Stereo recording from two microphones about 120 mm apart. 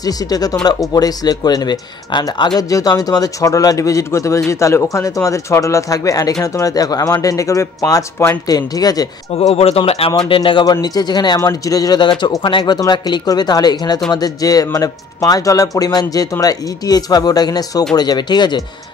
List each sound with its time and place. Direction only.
0.0 s speech: 30° left (ahead or behind)
9.3 s speech: 55° left (ahead or behind); by 18.6 s 35° left (ahead or behind)